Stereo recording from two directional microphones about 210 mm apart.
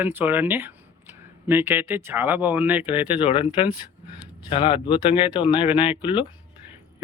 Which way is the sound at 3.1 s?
25° left (ahead or behind).